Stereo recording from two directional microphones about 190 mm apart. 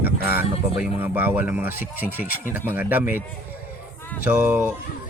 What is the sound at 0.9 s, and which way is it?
Speech, 10° right (ahead or behind).